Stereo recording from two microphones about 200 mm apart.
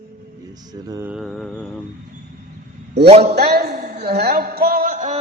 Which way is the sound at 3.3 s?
55° right (ahead or behind).